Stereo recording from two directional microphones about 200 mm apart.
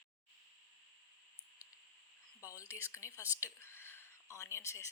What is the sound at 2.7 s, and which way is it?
Speech, 15° left (ahead or behind).